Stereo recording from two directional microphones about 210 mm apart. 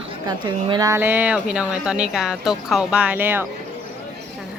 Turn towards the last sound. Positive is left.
turn(degrees=-10)  # may be behind; listen again after turning